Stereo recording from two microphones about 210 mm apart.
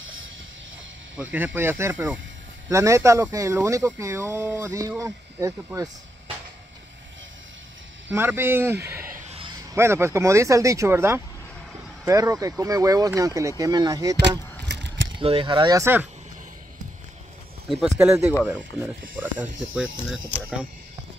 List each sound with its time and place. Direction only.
1.1 s speech: 5° right (ahead or behind)
8.1 s speech: 10° right (ahead or behind)
9.0 s vehicle: 35° right (ahead or behind)
9.8 s speech: 10° right (ahead or behind)
14.7 s keys jangling: 60° right (ahead or behind)
15.1 s speech: 25° right (ahead or behind)
17.6 s speech: centre (ahead or behind)
19.5 s speech: 65° right (ahead or behind)